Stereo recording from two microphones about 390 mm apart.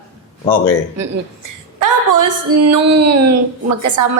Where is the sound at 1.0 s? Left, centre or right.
Right.